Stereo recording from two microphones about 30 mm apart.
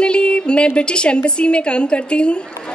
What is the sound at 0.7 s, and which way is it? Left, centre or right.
A woman's voice, left.